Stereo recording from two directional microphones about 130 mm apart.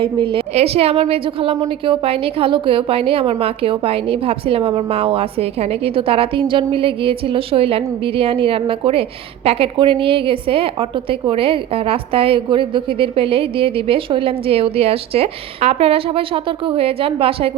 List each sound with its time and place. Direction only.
0.0 s a woman's voice: 40° right (ahead or behind)